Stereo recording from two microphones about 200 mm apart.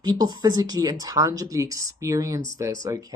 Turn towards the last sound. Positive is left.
turn(degrees=-15)  # may be behind; listen again after turning